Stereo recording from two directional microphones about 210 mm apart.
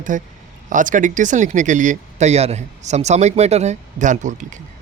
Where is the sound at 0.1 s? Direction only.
40° right (ahead or behind).